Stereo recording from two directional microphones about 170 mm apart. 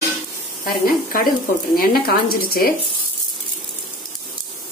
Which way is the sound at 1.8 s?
60° left (ahead or behind).